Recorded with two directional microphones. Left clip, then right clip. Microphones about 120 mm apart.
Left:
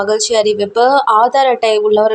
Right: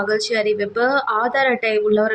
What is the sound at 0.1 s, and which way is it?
Speech, 40° left (ahead or behind).